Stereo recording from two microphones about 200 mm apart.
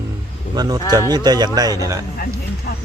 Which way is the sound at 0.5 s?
20° right (ahead or behind).